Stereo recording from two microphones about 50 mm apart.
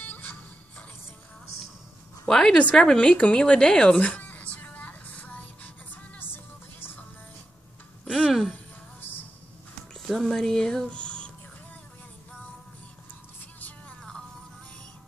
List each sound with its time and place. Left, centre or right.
0.0 s music: left
2.2 s speech: centre
4.0 s music: left
6.1 s music: left
8.1 s a sound: centre
9.9 s music: centre
10.3 s speech: centre
10.9 s a sound: left
13.6 s a sound: left